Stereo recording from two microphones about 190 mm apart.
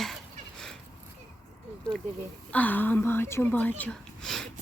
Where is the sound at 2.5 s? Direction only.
10° left (ahead or behind).